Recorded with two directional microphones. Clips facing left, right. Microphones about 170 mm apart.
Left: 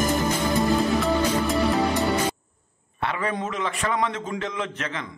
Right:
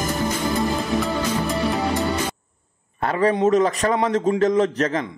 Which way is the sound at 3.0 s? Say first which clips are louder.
Right 9 dB; 40° right (ahead or behind).